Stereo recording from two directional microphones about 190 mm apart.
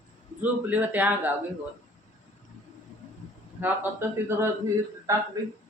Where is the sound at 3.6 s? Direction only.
10° right (ahead or behind).